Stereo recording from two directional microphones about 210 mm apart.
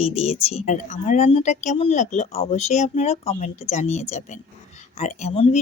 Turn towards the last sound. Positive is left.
turn(degrees=30)  # may be behind; listen again after turning